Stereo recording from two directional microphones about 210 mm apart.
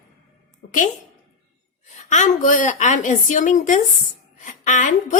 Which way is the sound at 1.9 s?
35° left (ahead or behind).